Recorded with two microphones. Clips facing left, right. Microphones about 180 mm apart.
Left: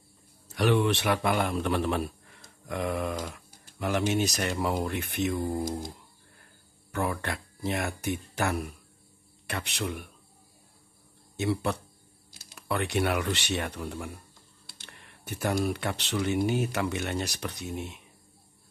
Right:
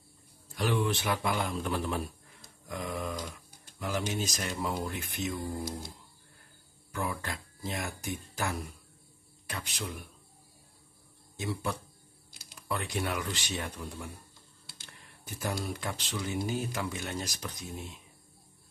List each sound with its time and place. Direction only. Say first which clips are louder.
0.6 s speech: left 5 dB; 70° left (ahead or behind)
6.9 s speech: left 5 dB; 65° left (ahead or behind)
11.3 s speech: left 6 dB; 70° left (ahead or behind)